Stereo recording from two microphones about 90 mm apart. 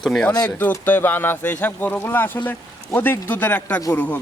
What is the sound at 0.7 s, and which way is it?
Speech, 20° left (ahead or behind).